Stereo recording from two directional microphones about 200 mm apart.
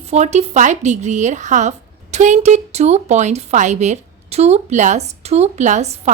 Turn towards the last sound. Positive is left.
turn(degrees=-35)  # may be behind; listen again after turning